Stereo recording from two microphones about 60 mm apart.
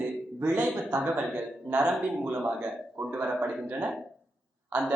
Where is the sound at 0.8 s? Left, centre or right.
Centre.